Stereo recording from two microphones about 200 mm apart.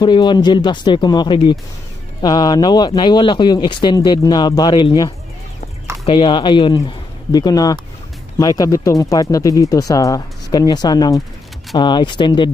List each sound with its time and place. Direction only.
0.0 s speech: 20° left (ahead or behind)